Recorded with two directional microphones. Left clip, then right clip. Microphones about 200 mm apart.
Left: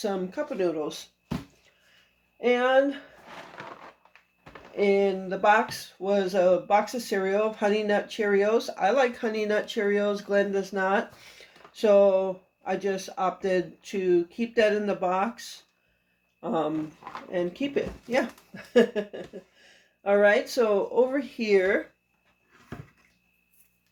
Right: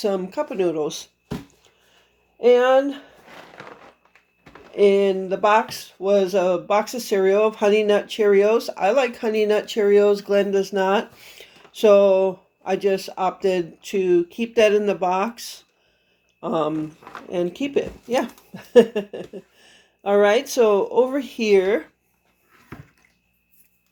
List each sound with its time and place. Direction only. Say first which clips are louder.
0.0 s speech: right 7 dB; 40° right (ahead or behind)
2.4 s speech: right 7 dB; 45° right (ahead or behind)
4.7 s speech: right 7 dB; 40° right (ahead or behind)